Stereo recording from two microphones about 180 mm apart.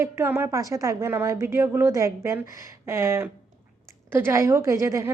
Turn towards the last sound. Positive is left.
turn(degrees=-15)  # may be behind; listen again after turning